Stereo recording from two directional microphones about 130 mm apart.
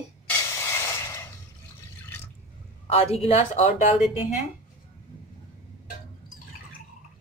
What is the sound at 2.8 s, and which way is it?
Speech, 50° left (ahead or behind).